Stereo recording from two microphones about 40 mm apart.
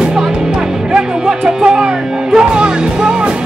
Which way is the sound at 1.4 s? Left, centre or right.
Centre.